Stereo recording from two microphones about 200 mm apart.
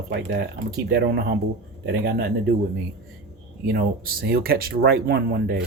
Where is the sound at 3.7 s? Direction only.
50° right (ahead or behind).